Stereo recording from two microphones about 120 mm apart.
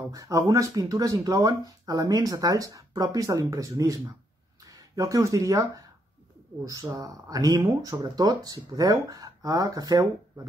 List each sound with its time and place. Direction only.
0.1 s speech: 30° right (ahead or behind)